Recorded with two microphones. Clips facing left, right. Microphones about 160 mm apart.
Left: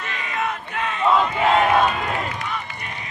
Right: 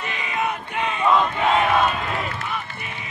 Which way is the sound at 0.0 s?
5° right (ahead or behind).